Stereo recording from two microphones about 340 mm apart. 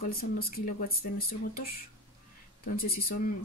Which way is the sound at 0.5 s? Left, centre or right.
Left.